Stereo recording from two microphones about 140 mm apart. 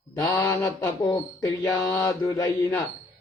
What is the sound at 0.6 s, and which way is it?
Speech, 25° left (ahead or behind).